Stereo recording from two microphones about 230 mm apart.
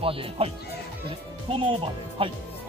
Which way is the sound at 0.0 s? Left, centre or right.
Right.